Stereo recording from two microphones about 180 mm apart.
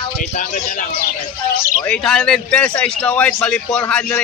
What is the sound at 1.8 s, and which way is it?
A man's voice, 5° left (ahead or behind).